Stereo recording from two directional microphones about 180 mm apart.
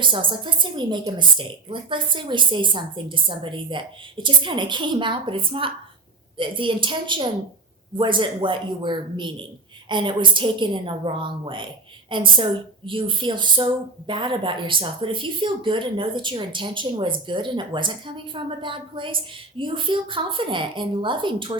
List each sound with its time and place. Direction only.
0.0 s a woman's voice: 25° right (ahead or behind)